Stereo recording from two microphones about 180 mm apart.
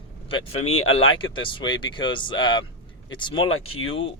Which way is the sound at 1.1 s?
25° left (ahead or behind).